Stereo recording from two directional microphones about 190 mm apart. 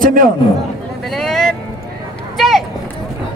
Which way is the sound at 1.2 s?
Centre (ahead or behind).